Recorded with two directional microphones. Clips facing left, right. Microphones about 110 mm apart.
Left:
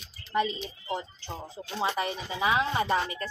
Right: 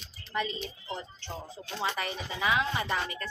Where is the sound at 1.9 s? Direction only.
25° left (ahead or behind).